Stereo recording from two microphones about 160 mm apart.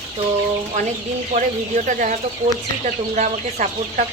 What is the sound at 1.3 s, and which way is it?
Speech, 50° right (ahead or behind).